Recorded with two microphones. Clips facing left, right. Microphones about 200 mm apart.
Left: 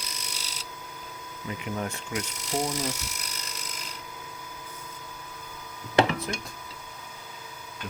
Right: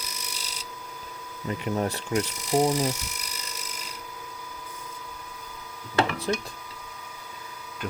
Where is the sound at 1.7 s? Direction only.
35° right (ahead or behind).